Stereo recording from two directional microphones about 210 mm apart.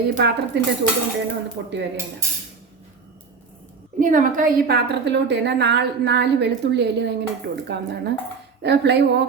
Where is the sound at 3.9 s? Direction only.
40° right (ahead or behind).